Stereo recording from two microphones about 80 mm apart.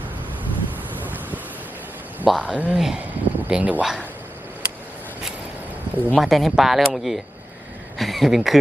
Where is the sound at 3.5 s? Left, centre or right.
Centre.